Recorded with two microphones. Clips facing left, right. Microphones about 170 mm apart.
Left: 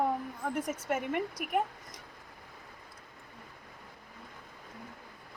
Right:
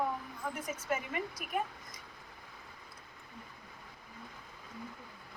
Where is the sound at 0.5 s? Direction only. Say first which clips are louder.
Left 4 dB; 70° left (ahead or behind).